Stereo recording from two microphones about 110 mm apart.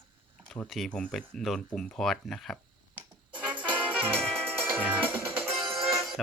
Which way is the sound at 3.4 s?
10° right (ahead or behind).